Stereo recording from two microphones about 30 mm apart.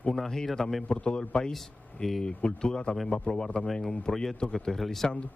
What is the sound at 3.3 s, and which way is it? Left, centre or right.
Speech, left.